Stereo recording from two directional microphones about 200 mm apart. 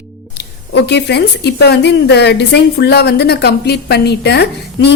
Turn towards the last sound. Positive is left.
turn(degrees=55)  # may be behind; listen again after turning